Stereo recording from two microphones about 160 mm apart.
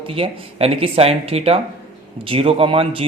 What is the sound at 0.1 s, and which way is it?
Speech, 35° right (ahead or behind).